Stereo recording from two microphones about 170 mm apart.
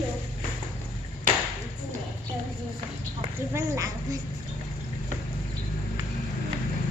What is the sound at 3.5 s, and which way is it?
Speech, 20° right (ahead or behind).